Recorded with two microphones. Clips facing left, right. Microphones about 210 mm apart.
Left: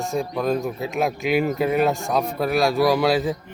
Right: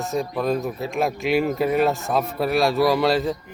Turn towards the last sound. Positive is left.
turn(degrees=0)  # may be behind; listen again after turning